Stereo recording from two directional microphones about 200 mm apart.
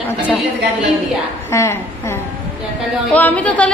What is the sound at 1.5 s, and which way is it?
Speech, 15° left (ahead or behind).